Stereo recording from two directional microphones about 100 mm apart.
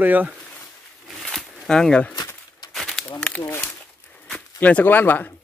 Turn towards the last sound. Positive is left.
turn(degrees=20)  # may be behind; listen again after turning